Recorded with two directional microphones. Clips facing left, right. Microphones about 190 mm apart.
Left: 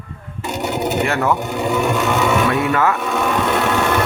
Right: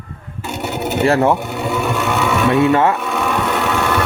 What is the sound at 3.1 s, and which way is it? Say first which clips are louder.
Sewing machine: left 1 dB; centre (ahead or behind).